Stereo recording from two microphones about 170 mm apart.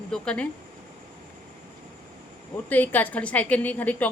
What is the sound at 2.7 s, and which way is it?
A woman's voice, 10° left (ahead or behind).